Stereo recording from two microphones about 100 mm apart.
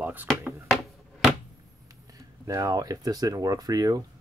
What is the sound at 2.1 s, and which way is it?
Speech, 35° right (ahead or behind).